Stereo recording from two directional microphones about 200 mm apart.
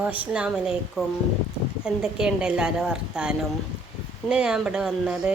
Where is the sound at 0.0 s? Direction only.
5° right (ahead or behind).